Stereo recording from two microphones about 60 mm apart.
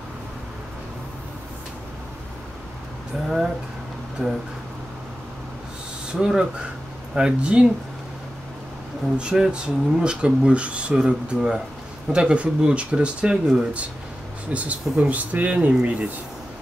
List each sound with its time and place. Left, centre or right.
4.2 s speech: centre
6.1 s speech: centre
9.2 s speech: centre
14.5 s speech: right